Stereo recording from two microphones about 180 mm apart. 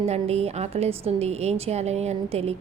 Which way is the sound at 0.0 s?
35° right (ahead or behind).